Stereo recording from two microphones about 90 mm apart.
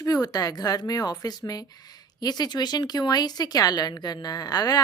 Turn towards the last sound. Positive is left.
turn(degrees=45)  # may be behind; listen again after turning